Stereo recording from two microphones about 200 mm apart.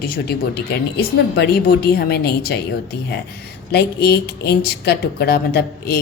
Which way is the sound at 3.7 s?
55° left (ahead or behind).